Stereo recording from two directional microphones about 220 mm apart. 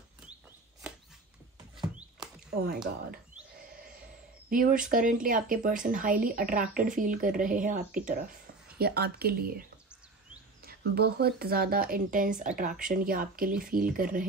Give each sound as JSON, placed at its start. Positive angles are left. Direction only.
{"t": 4.5, "sound": "a woman's voice", "side_deg": -40}
{"t": 10.6, "sound": "a woman's voice", "side_deg": -45}